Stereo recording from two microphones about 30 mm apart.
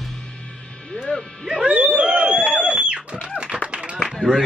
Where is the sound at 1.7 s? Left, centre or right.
Right.